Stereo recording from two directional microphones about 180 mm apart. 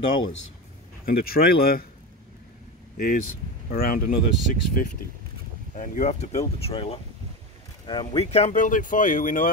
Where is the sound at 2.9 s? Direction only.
50° left (ahead or behind).